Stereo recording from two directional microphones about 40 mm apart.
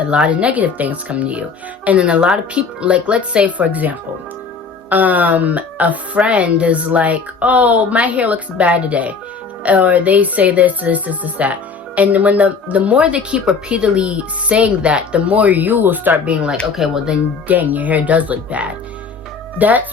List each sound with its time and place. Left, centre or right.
0.1 s speech: right
16.2 s speech: right
16.7 s speech: centre
17.5 s speech: right